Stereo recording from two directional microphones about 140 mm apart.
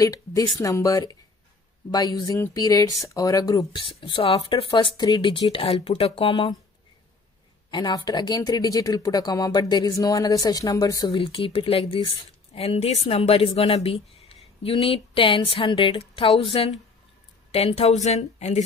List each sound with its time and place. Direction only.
0.0 s speech: 25° left (ahead or behind); by 6.3 s 40° left (ahead or behind)
7.7 s speech: 30° left (ahead or behind)
11.1 s a woman's voice: 40° left (ahead or behind)